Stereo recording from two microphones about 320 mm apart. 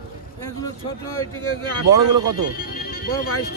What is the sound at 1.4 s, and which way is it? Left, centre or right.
Speech, right.